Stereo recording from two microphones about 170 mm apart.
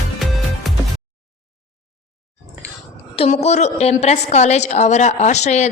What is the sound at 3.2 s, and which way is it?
A woman's voice, 40° left (ahead or behind).